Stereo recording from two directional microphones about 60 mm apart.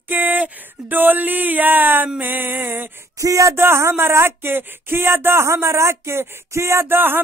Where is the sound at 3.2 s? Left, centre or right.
Right.